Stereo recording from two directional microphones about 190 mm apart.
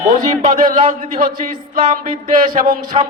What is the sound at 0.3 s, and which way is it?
Speech, 45° right (ahead or behind).